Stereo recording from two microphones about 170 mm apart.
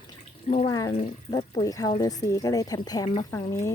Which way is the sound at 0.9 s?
35° left (ahead or behind).